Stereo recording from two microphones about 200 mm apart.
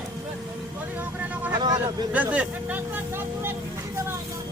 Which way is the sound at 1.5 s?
20° right (ahead or behind).